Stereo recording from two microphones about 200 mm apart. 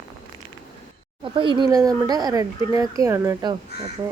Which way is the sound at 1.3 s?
25° right (ahead or behind).